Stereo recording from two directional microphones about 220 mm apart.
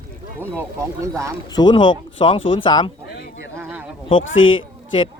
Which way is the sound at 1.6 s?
20° left (ahead or behind).